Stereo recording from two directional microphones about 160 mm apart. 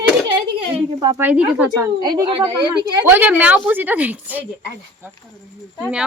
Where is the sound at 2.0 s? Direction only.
25° right (ahead or behind).